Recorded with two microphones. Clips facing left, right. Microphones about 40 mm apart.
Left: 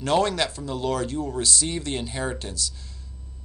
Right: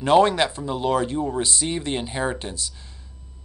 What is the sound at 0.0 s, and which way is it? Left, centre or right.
Speech, right.